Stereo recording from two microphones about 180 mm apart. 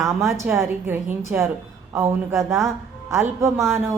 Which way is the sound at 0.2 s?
15° right (ahead or behind).